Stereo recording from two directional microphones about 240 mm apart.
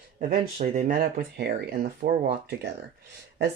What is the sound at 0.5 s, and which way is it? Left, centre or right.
Speech, right.